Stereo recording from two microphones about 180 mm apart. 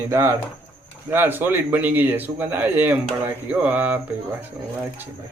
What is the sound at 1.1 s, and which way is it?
A man's voice, 10° right (ahead or behind).